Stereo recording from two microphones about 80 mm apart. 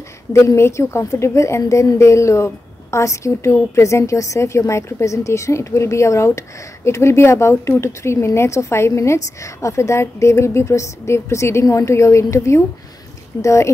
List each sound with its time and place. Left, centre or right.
0.3 s a woman's voice: left